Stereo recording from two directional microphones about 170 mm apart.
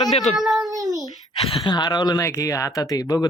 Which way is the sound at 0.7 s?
20° right (ahead or behind).